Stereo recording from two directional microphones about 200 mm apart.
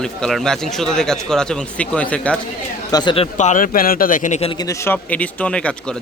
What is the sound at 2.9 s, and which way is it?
A man's voice, 25° left (ahead or behind).